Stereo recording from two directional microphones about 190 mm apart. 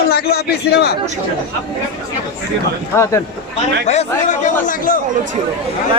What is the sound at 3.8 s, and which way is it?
Speech, 40° left (ahead or behind).